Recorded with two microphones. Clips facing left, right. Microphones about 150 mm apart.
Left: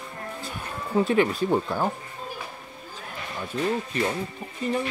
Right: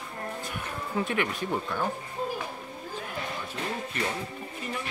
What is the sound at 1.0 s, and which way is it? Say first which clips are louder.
Speech: left 8 dB; 30° left (ahead or behind).